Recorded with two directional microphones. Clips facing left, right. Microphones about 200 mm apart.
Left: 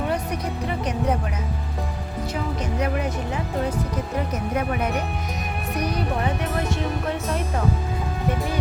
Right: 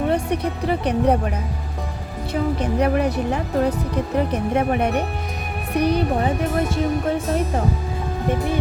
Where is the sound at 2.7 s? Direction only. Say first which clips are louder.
Right 6 dB; 35° right (ahead or behind).